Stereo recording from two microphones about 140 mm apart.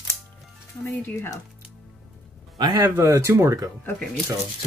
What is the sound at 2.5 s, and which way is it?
A man's voice, 30° right (ahead or behind).